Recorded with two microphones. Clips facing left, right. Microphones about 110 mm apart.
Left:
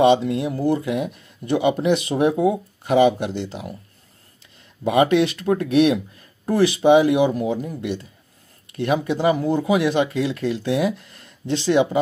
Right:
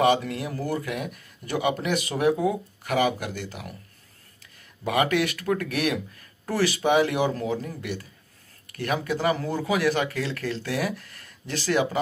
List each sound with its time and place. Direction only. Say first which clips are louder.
0.0 s speech: left 6 dB; 25° left (ahead or behind)
4.8 s speech: left 7 dB; 20° left (ahead or behind)